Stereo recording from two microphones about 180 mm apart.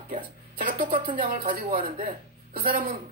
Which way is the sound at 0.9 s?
25° right (ahead or behind).